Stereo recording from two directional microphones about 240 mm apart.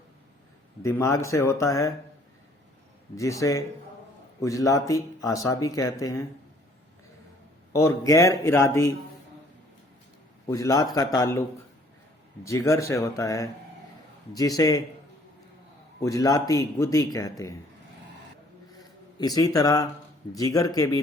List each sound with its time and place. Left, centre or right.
0.8 s speech: centre
3.4 s speech: centre
7.7 s speech: centre
10.4 s speech: centre
12.5 s speech: centre
16.0 s speech: centre
19.2 s speech: centre